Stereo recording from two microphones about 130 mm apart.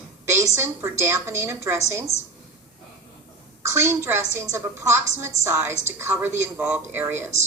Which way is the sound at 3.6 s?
20° right (ahead or behind).